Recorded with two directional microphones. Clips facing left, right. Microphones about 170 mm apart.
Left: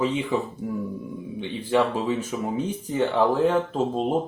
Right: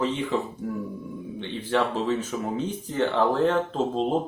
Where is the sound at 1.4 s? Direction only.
10° left (ahead or behind).